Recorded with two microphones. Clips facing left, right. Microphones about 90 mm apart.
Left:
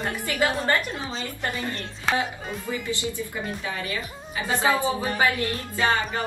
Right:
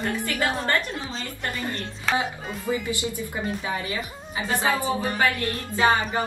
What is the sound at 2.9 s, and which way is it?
A woman's voice, 20° right (ahead or behind).